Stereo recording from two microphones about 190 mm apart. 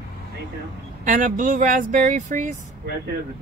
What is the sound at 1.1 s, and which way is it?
Speech, 45° right (ahead or behind).